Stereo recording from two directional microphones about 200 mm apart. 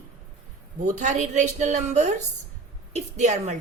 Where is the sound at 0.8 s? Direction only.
35° right (ahead or behind).